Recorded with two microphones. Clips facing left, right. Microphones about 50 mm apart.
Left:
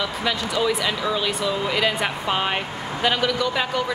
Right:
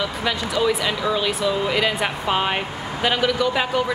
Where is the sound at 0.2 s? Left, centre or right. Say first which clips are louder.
Right 1 dB; centre.